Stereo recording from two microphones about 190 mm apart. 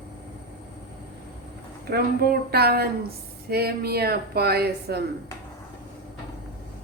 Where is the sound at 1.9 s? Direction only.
55° right (ahead or behind).